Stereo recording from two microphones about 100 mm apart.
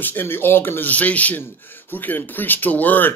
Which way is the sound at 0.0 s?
20° left (ahead or behind).